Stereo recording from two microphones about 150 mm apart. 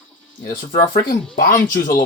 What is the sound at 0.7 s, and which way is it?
Speech, 70° left (ahead or behind).